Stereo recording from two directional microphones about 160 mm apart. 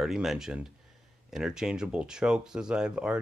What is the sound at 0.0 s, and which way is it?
Speech, centre (ahead or behind).